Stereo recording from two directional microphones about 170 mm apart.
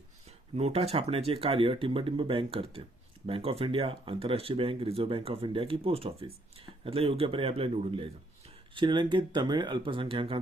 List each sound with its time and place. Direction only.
0.3 s speech: 40° right (ahead or behind)